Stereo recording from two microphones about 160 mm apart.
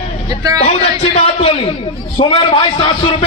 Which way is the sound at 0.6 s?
40° left (ahead or behind).